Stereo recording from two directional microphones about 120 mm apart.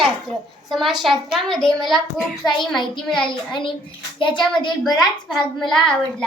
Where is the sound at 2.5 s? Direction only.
40° left (ahead or behind).